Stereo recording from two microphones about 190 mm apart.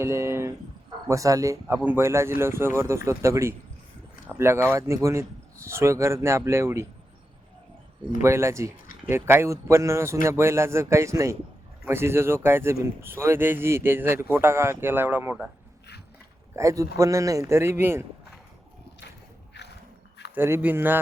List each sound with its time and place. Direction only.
0.0 s speech: 15° right (ahead or behind)
8.2 s speech: 15° right (ahead or behind)
16.6 s speech: 15° right (ahead or behind)
19.6 s music: 65° left (ahead or behind)
20.3 s speech: 10° right (ahead or behind)